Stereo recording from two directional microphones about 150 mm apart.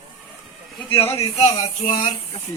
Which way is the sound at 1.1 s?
45° left (ahead or behind).